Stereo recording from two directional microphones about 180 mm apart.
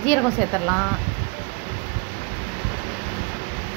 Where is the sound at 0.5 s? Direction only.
10° left (ahead or behind).